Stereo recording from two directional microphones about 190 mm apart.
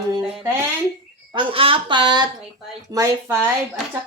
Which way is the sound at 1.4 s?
30° right (ahead or behind).